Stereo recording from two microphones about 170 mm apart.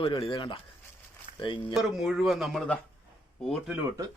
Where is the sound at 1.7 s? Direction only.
Centre (ahead or behind).